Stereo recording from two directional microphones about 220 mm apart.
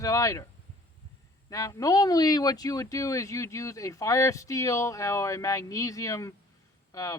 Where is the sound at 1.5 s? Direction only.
15° left (ahead or behind).